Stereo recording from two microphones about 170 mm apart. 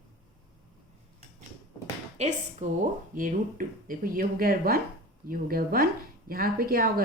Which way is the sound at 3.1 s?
55° right (ahead or behind).